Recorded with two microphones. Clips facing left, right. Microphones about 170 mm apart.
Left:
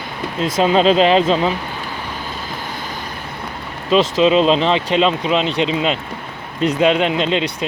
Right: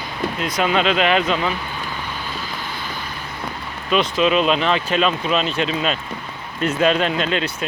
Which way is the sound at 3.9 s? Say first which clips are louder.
Left 4 dB; 25° left (ahead or behind).